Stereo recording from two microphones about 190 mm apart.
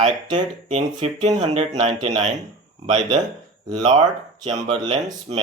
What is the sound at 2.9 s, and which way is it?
Speech, 25° right (ahead or behind).